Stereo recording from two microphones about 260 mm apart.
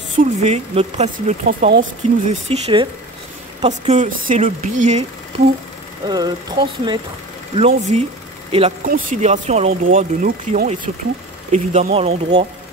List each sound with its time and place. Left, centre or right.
0.1 s speech: right
6.0 s speech: centre